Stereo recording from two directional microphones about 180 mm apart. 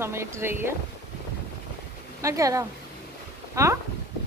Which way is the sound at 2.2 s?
20° right (ahead or behind).